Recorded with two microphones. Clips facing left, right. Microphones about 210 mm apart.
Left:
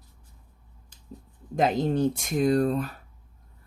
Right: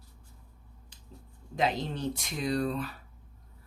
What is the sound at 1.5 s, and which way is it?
Speech, 50° left (ahead or behind).